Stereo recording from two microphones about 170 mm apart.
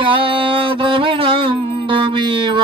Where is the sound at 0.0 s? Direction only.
30° right (ahead or behind).